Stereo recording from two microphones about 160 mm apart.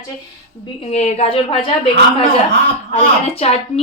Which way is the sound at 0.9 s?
45° left (ahead or behind).